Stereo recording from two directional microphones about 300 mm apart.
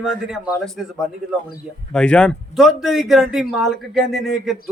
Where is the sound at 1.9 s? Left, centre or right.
Centre.